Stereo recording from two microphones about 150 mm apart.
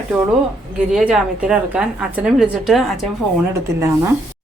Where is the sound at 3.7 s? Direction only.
20° right (ahead or behind).